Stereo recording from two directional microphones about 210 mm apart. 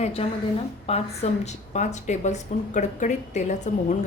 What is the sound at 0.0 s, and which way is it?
A woman's voice, 30° left (ahead or behind).